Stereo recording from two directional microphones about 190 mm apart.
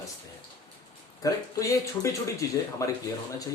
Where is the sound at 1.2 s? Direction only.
15° left (ahead or behind).